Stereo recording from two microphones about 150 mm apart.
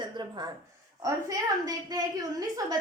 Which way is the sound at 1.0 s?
25° right (ahead or behind).